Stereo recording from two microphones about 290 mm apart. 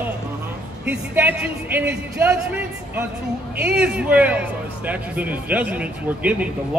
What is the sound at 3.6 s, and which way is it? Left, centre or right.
A man's voice, centre.